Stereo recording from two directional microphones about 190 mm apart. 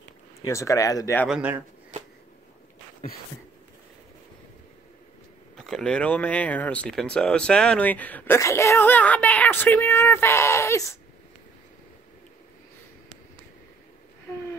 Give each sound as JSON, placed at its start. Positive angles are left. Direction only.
{"t": 0.4, "sound": "speech", "side_deg": 15}
{"t": 1.2, "sound": "a man's voice", "side_deg": -5}
{"t": 5.7, "sound": "speech", "side_deg": 5}